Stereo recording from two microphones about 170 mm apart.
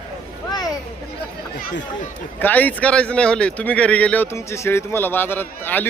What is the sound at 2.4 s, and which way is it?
Speech, 10° left (ahead or behind).